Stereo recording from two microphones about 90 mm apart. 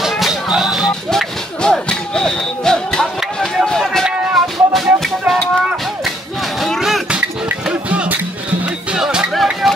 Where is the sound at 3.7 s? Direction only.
5° left (ahead or behind).